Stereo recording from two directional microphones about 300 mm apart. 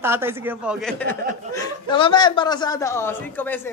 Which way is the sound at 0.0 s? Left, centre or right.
Centre.